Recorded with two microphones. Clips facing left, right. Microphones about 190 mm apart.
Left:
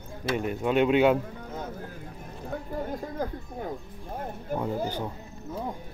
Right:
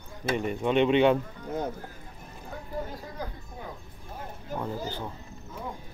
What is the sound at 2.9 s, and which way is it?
Speech, 50° left (ahead or behind).